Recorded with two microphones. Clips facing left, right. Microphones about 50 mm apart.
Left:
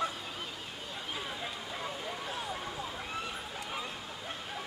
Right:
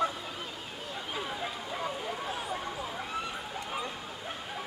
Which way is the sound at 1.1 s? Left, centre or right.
Centre.